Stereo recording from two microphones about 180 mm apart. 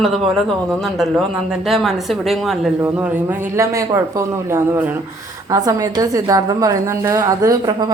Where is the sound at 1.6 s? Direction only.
Centre (ahead or behind).